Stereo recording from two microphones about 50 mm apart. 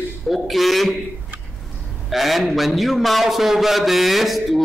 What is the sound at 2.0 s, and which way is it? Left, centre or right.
Speech, centre.